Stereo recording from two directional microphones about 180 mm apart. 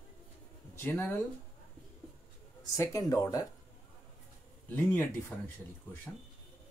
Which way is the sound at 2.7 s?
15° left (ahead or behind).